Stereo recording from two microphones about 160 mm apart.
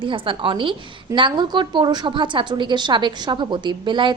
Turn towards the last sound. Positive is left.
turn(degrees=-30)  # may be behind; listen again after turning